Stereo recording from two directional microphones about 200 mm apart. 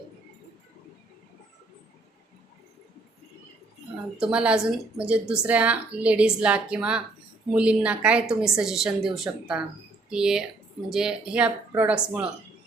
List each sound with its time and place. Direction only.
4.2 s a woman's voice: 5° right (ahead or behind)